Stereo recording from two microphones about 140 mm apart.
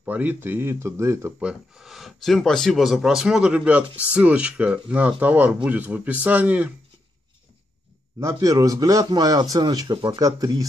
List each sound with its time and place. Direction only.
0.0 s speech: 10° right (ahead or behind)
1.4 s speech: 5° right (ahead or behind)
8.2 s a man's voice: 25° right (ahead or behind)